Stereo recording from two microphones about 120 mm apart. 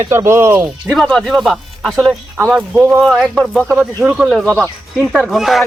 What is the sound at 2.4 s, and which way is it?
Speech, 25° right (ahead or behind).